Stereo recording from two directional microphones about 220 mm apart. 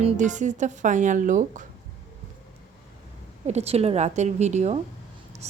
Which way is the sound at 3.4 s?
30° right (ahead or behind).